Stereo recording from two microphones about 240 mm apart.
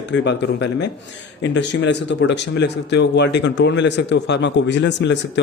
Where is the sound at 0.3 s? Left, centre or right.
Left.